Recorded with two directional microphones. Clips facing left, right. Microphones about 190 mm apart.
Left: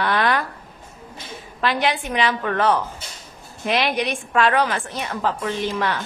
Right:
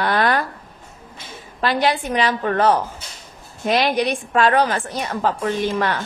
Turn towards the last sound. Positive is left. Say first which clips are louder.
# right 3 dB
turn(degrees=-45)  # may be behind; listen again after turning